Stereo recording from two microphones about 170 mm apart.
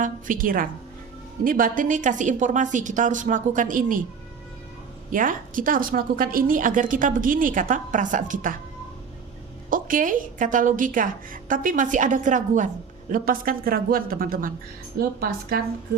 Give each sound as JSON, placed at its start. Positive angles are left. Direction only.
{"t": 0.0, "sound": "a woman's voice", "side_deg": -50}
{"t": 5.1, "sound": "a woman's voice", "side_deg": -50}
{"t": 9.6, "sound": "a woman's voice", "side_deg": -55}